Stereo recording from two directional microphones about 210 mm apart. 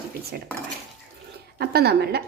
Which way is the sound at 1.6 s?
50° right (ahead or behind).